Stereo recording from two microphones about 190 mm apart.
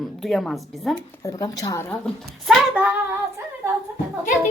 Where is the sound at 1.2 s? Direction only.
15° left (ahead or behind).